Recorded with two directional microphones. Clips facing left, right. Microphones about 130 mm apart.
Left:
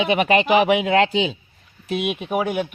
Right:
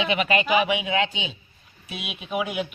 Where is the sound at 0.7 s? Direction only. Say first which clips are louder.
Left 8 dB; 65° left (ahead or behind).